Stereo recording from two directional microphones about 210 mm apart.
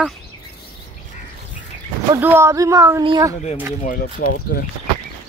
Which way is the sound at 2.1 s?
10° right (ahead or behind).